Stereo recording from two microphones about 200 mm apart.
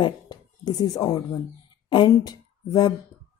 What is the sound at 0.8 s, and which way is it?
Speech, 15° left (ahead or behind).